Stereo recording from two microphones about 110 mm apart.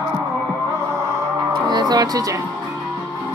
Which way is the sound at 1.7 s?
40° right (ahead or behind).